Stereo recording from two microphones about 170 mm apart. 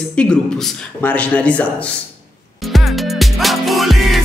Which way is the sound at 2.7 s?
Centre (ahead or behind).